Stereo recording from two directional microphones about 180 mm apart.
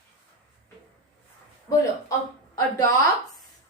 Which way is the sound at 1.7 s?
20° left (ahead or behind).